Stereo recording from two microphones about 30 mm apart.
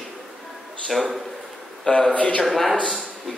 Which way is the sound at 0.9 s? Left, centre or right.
Centre.